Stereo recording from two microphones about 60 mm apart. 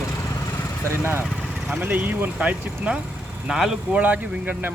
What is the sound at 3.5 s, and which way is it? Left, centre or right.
Speech, centre.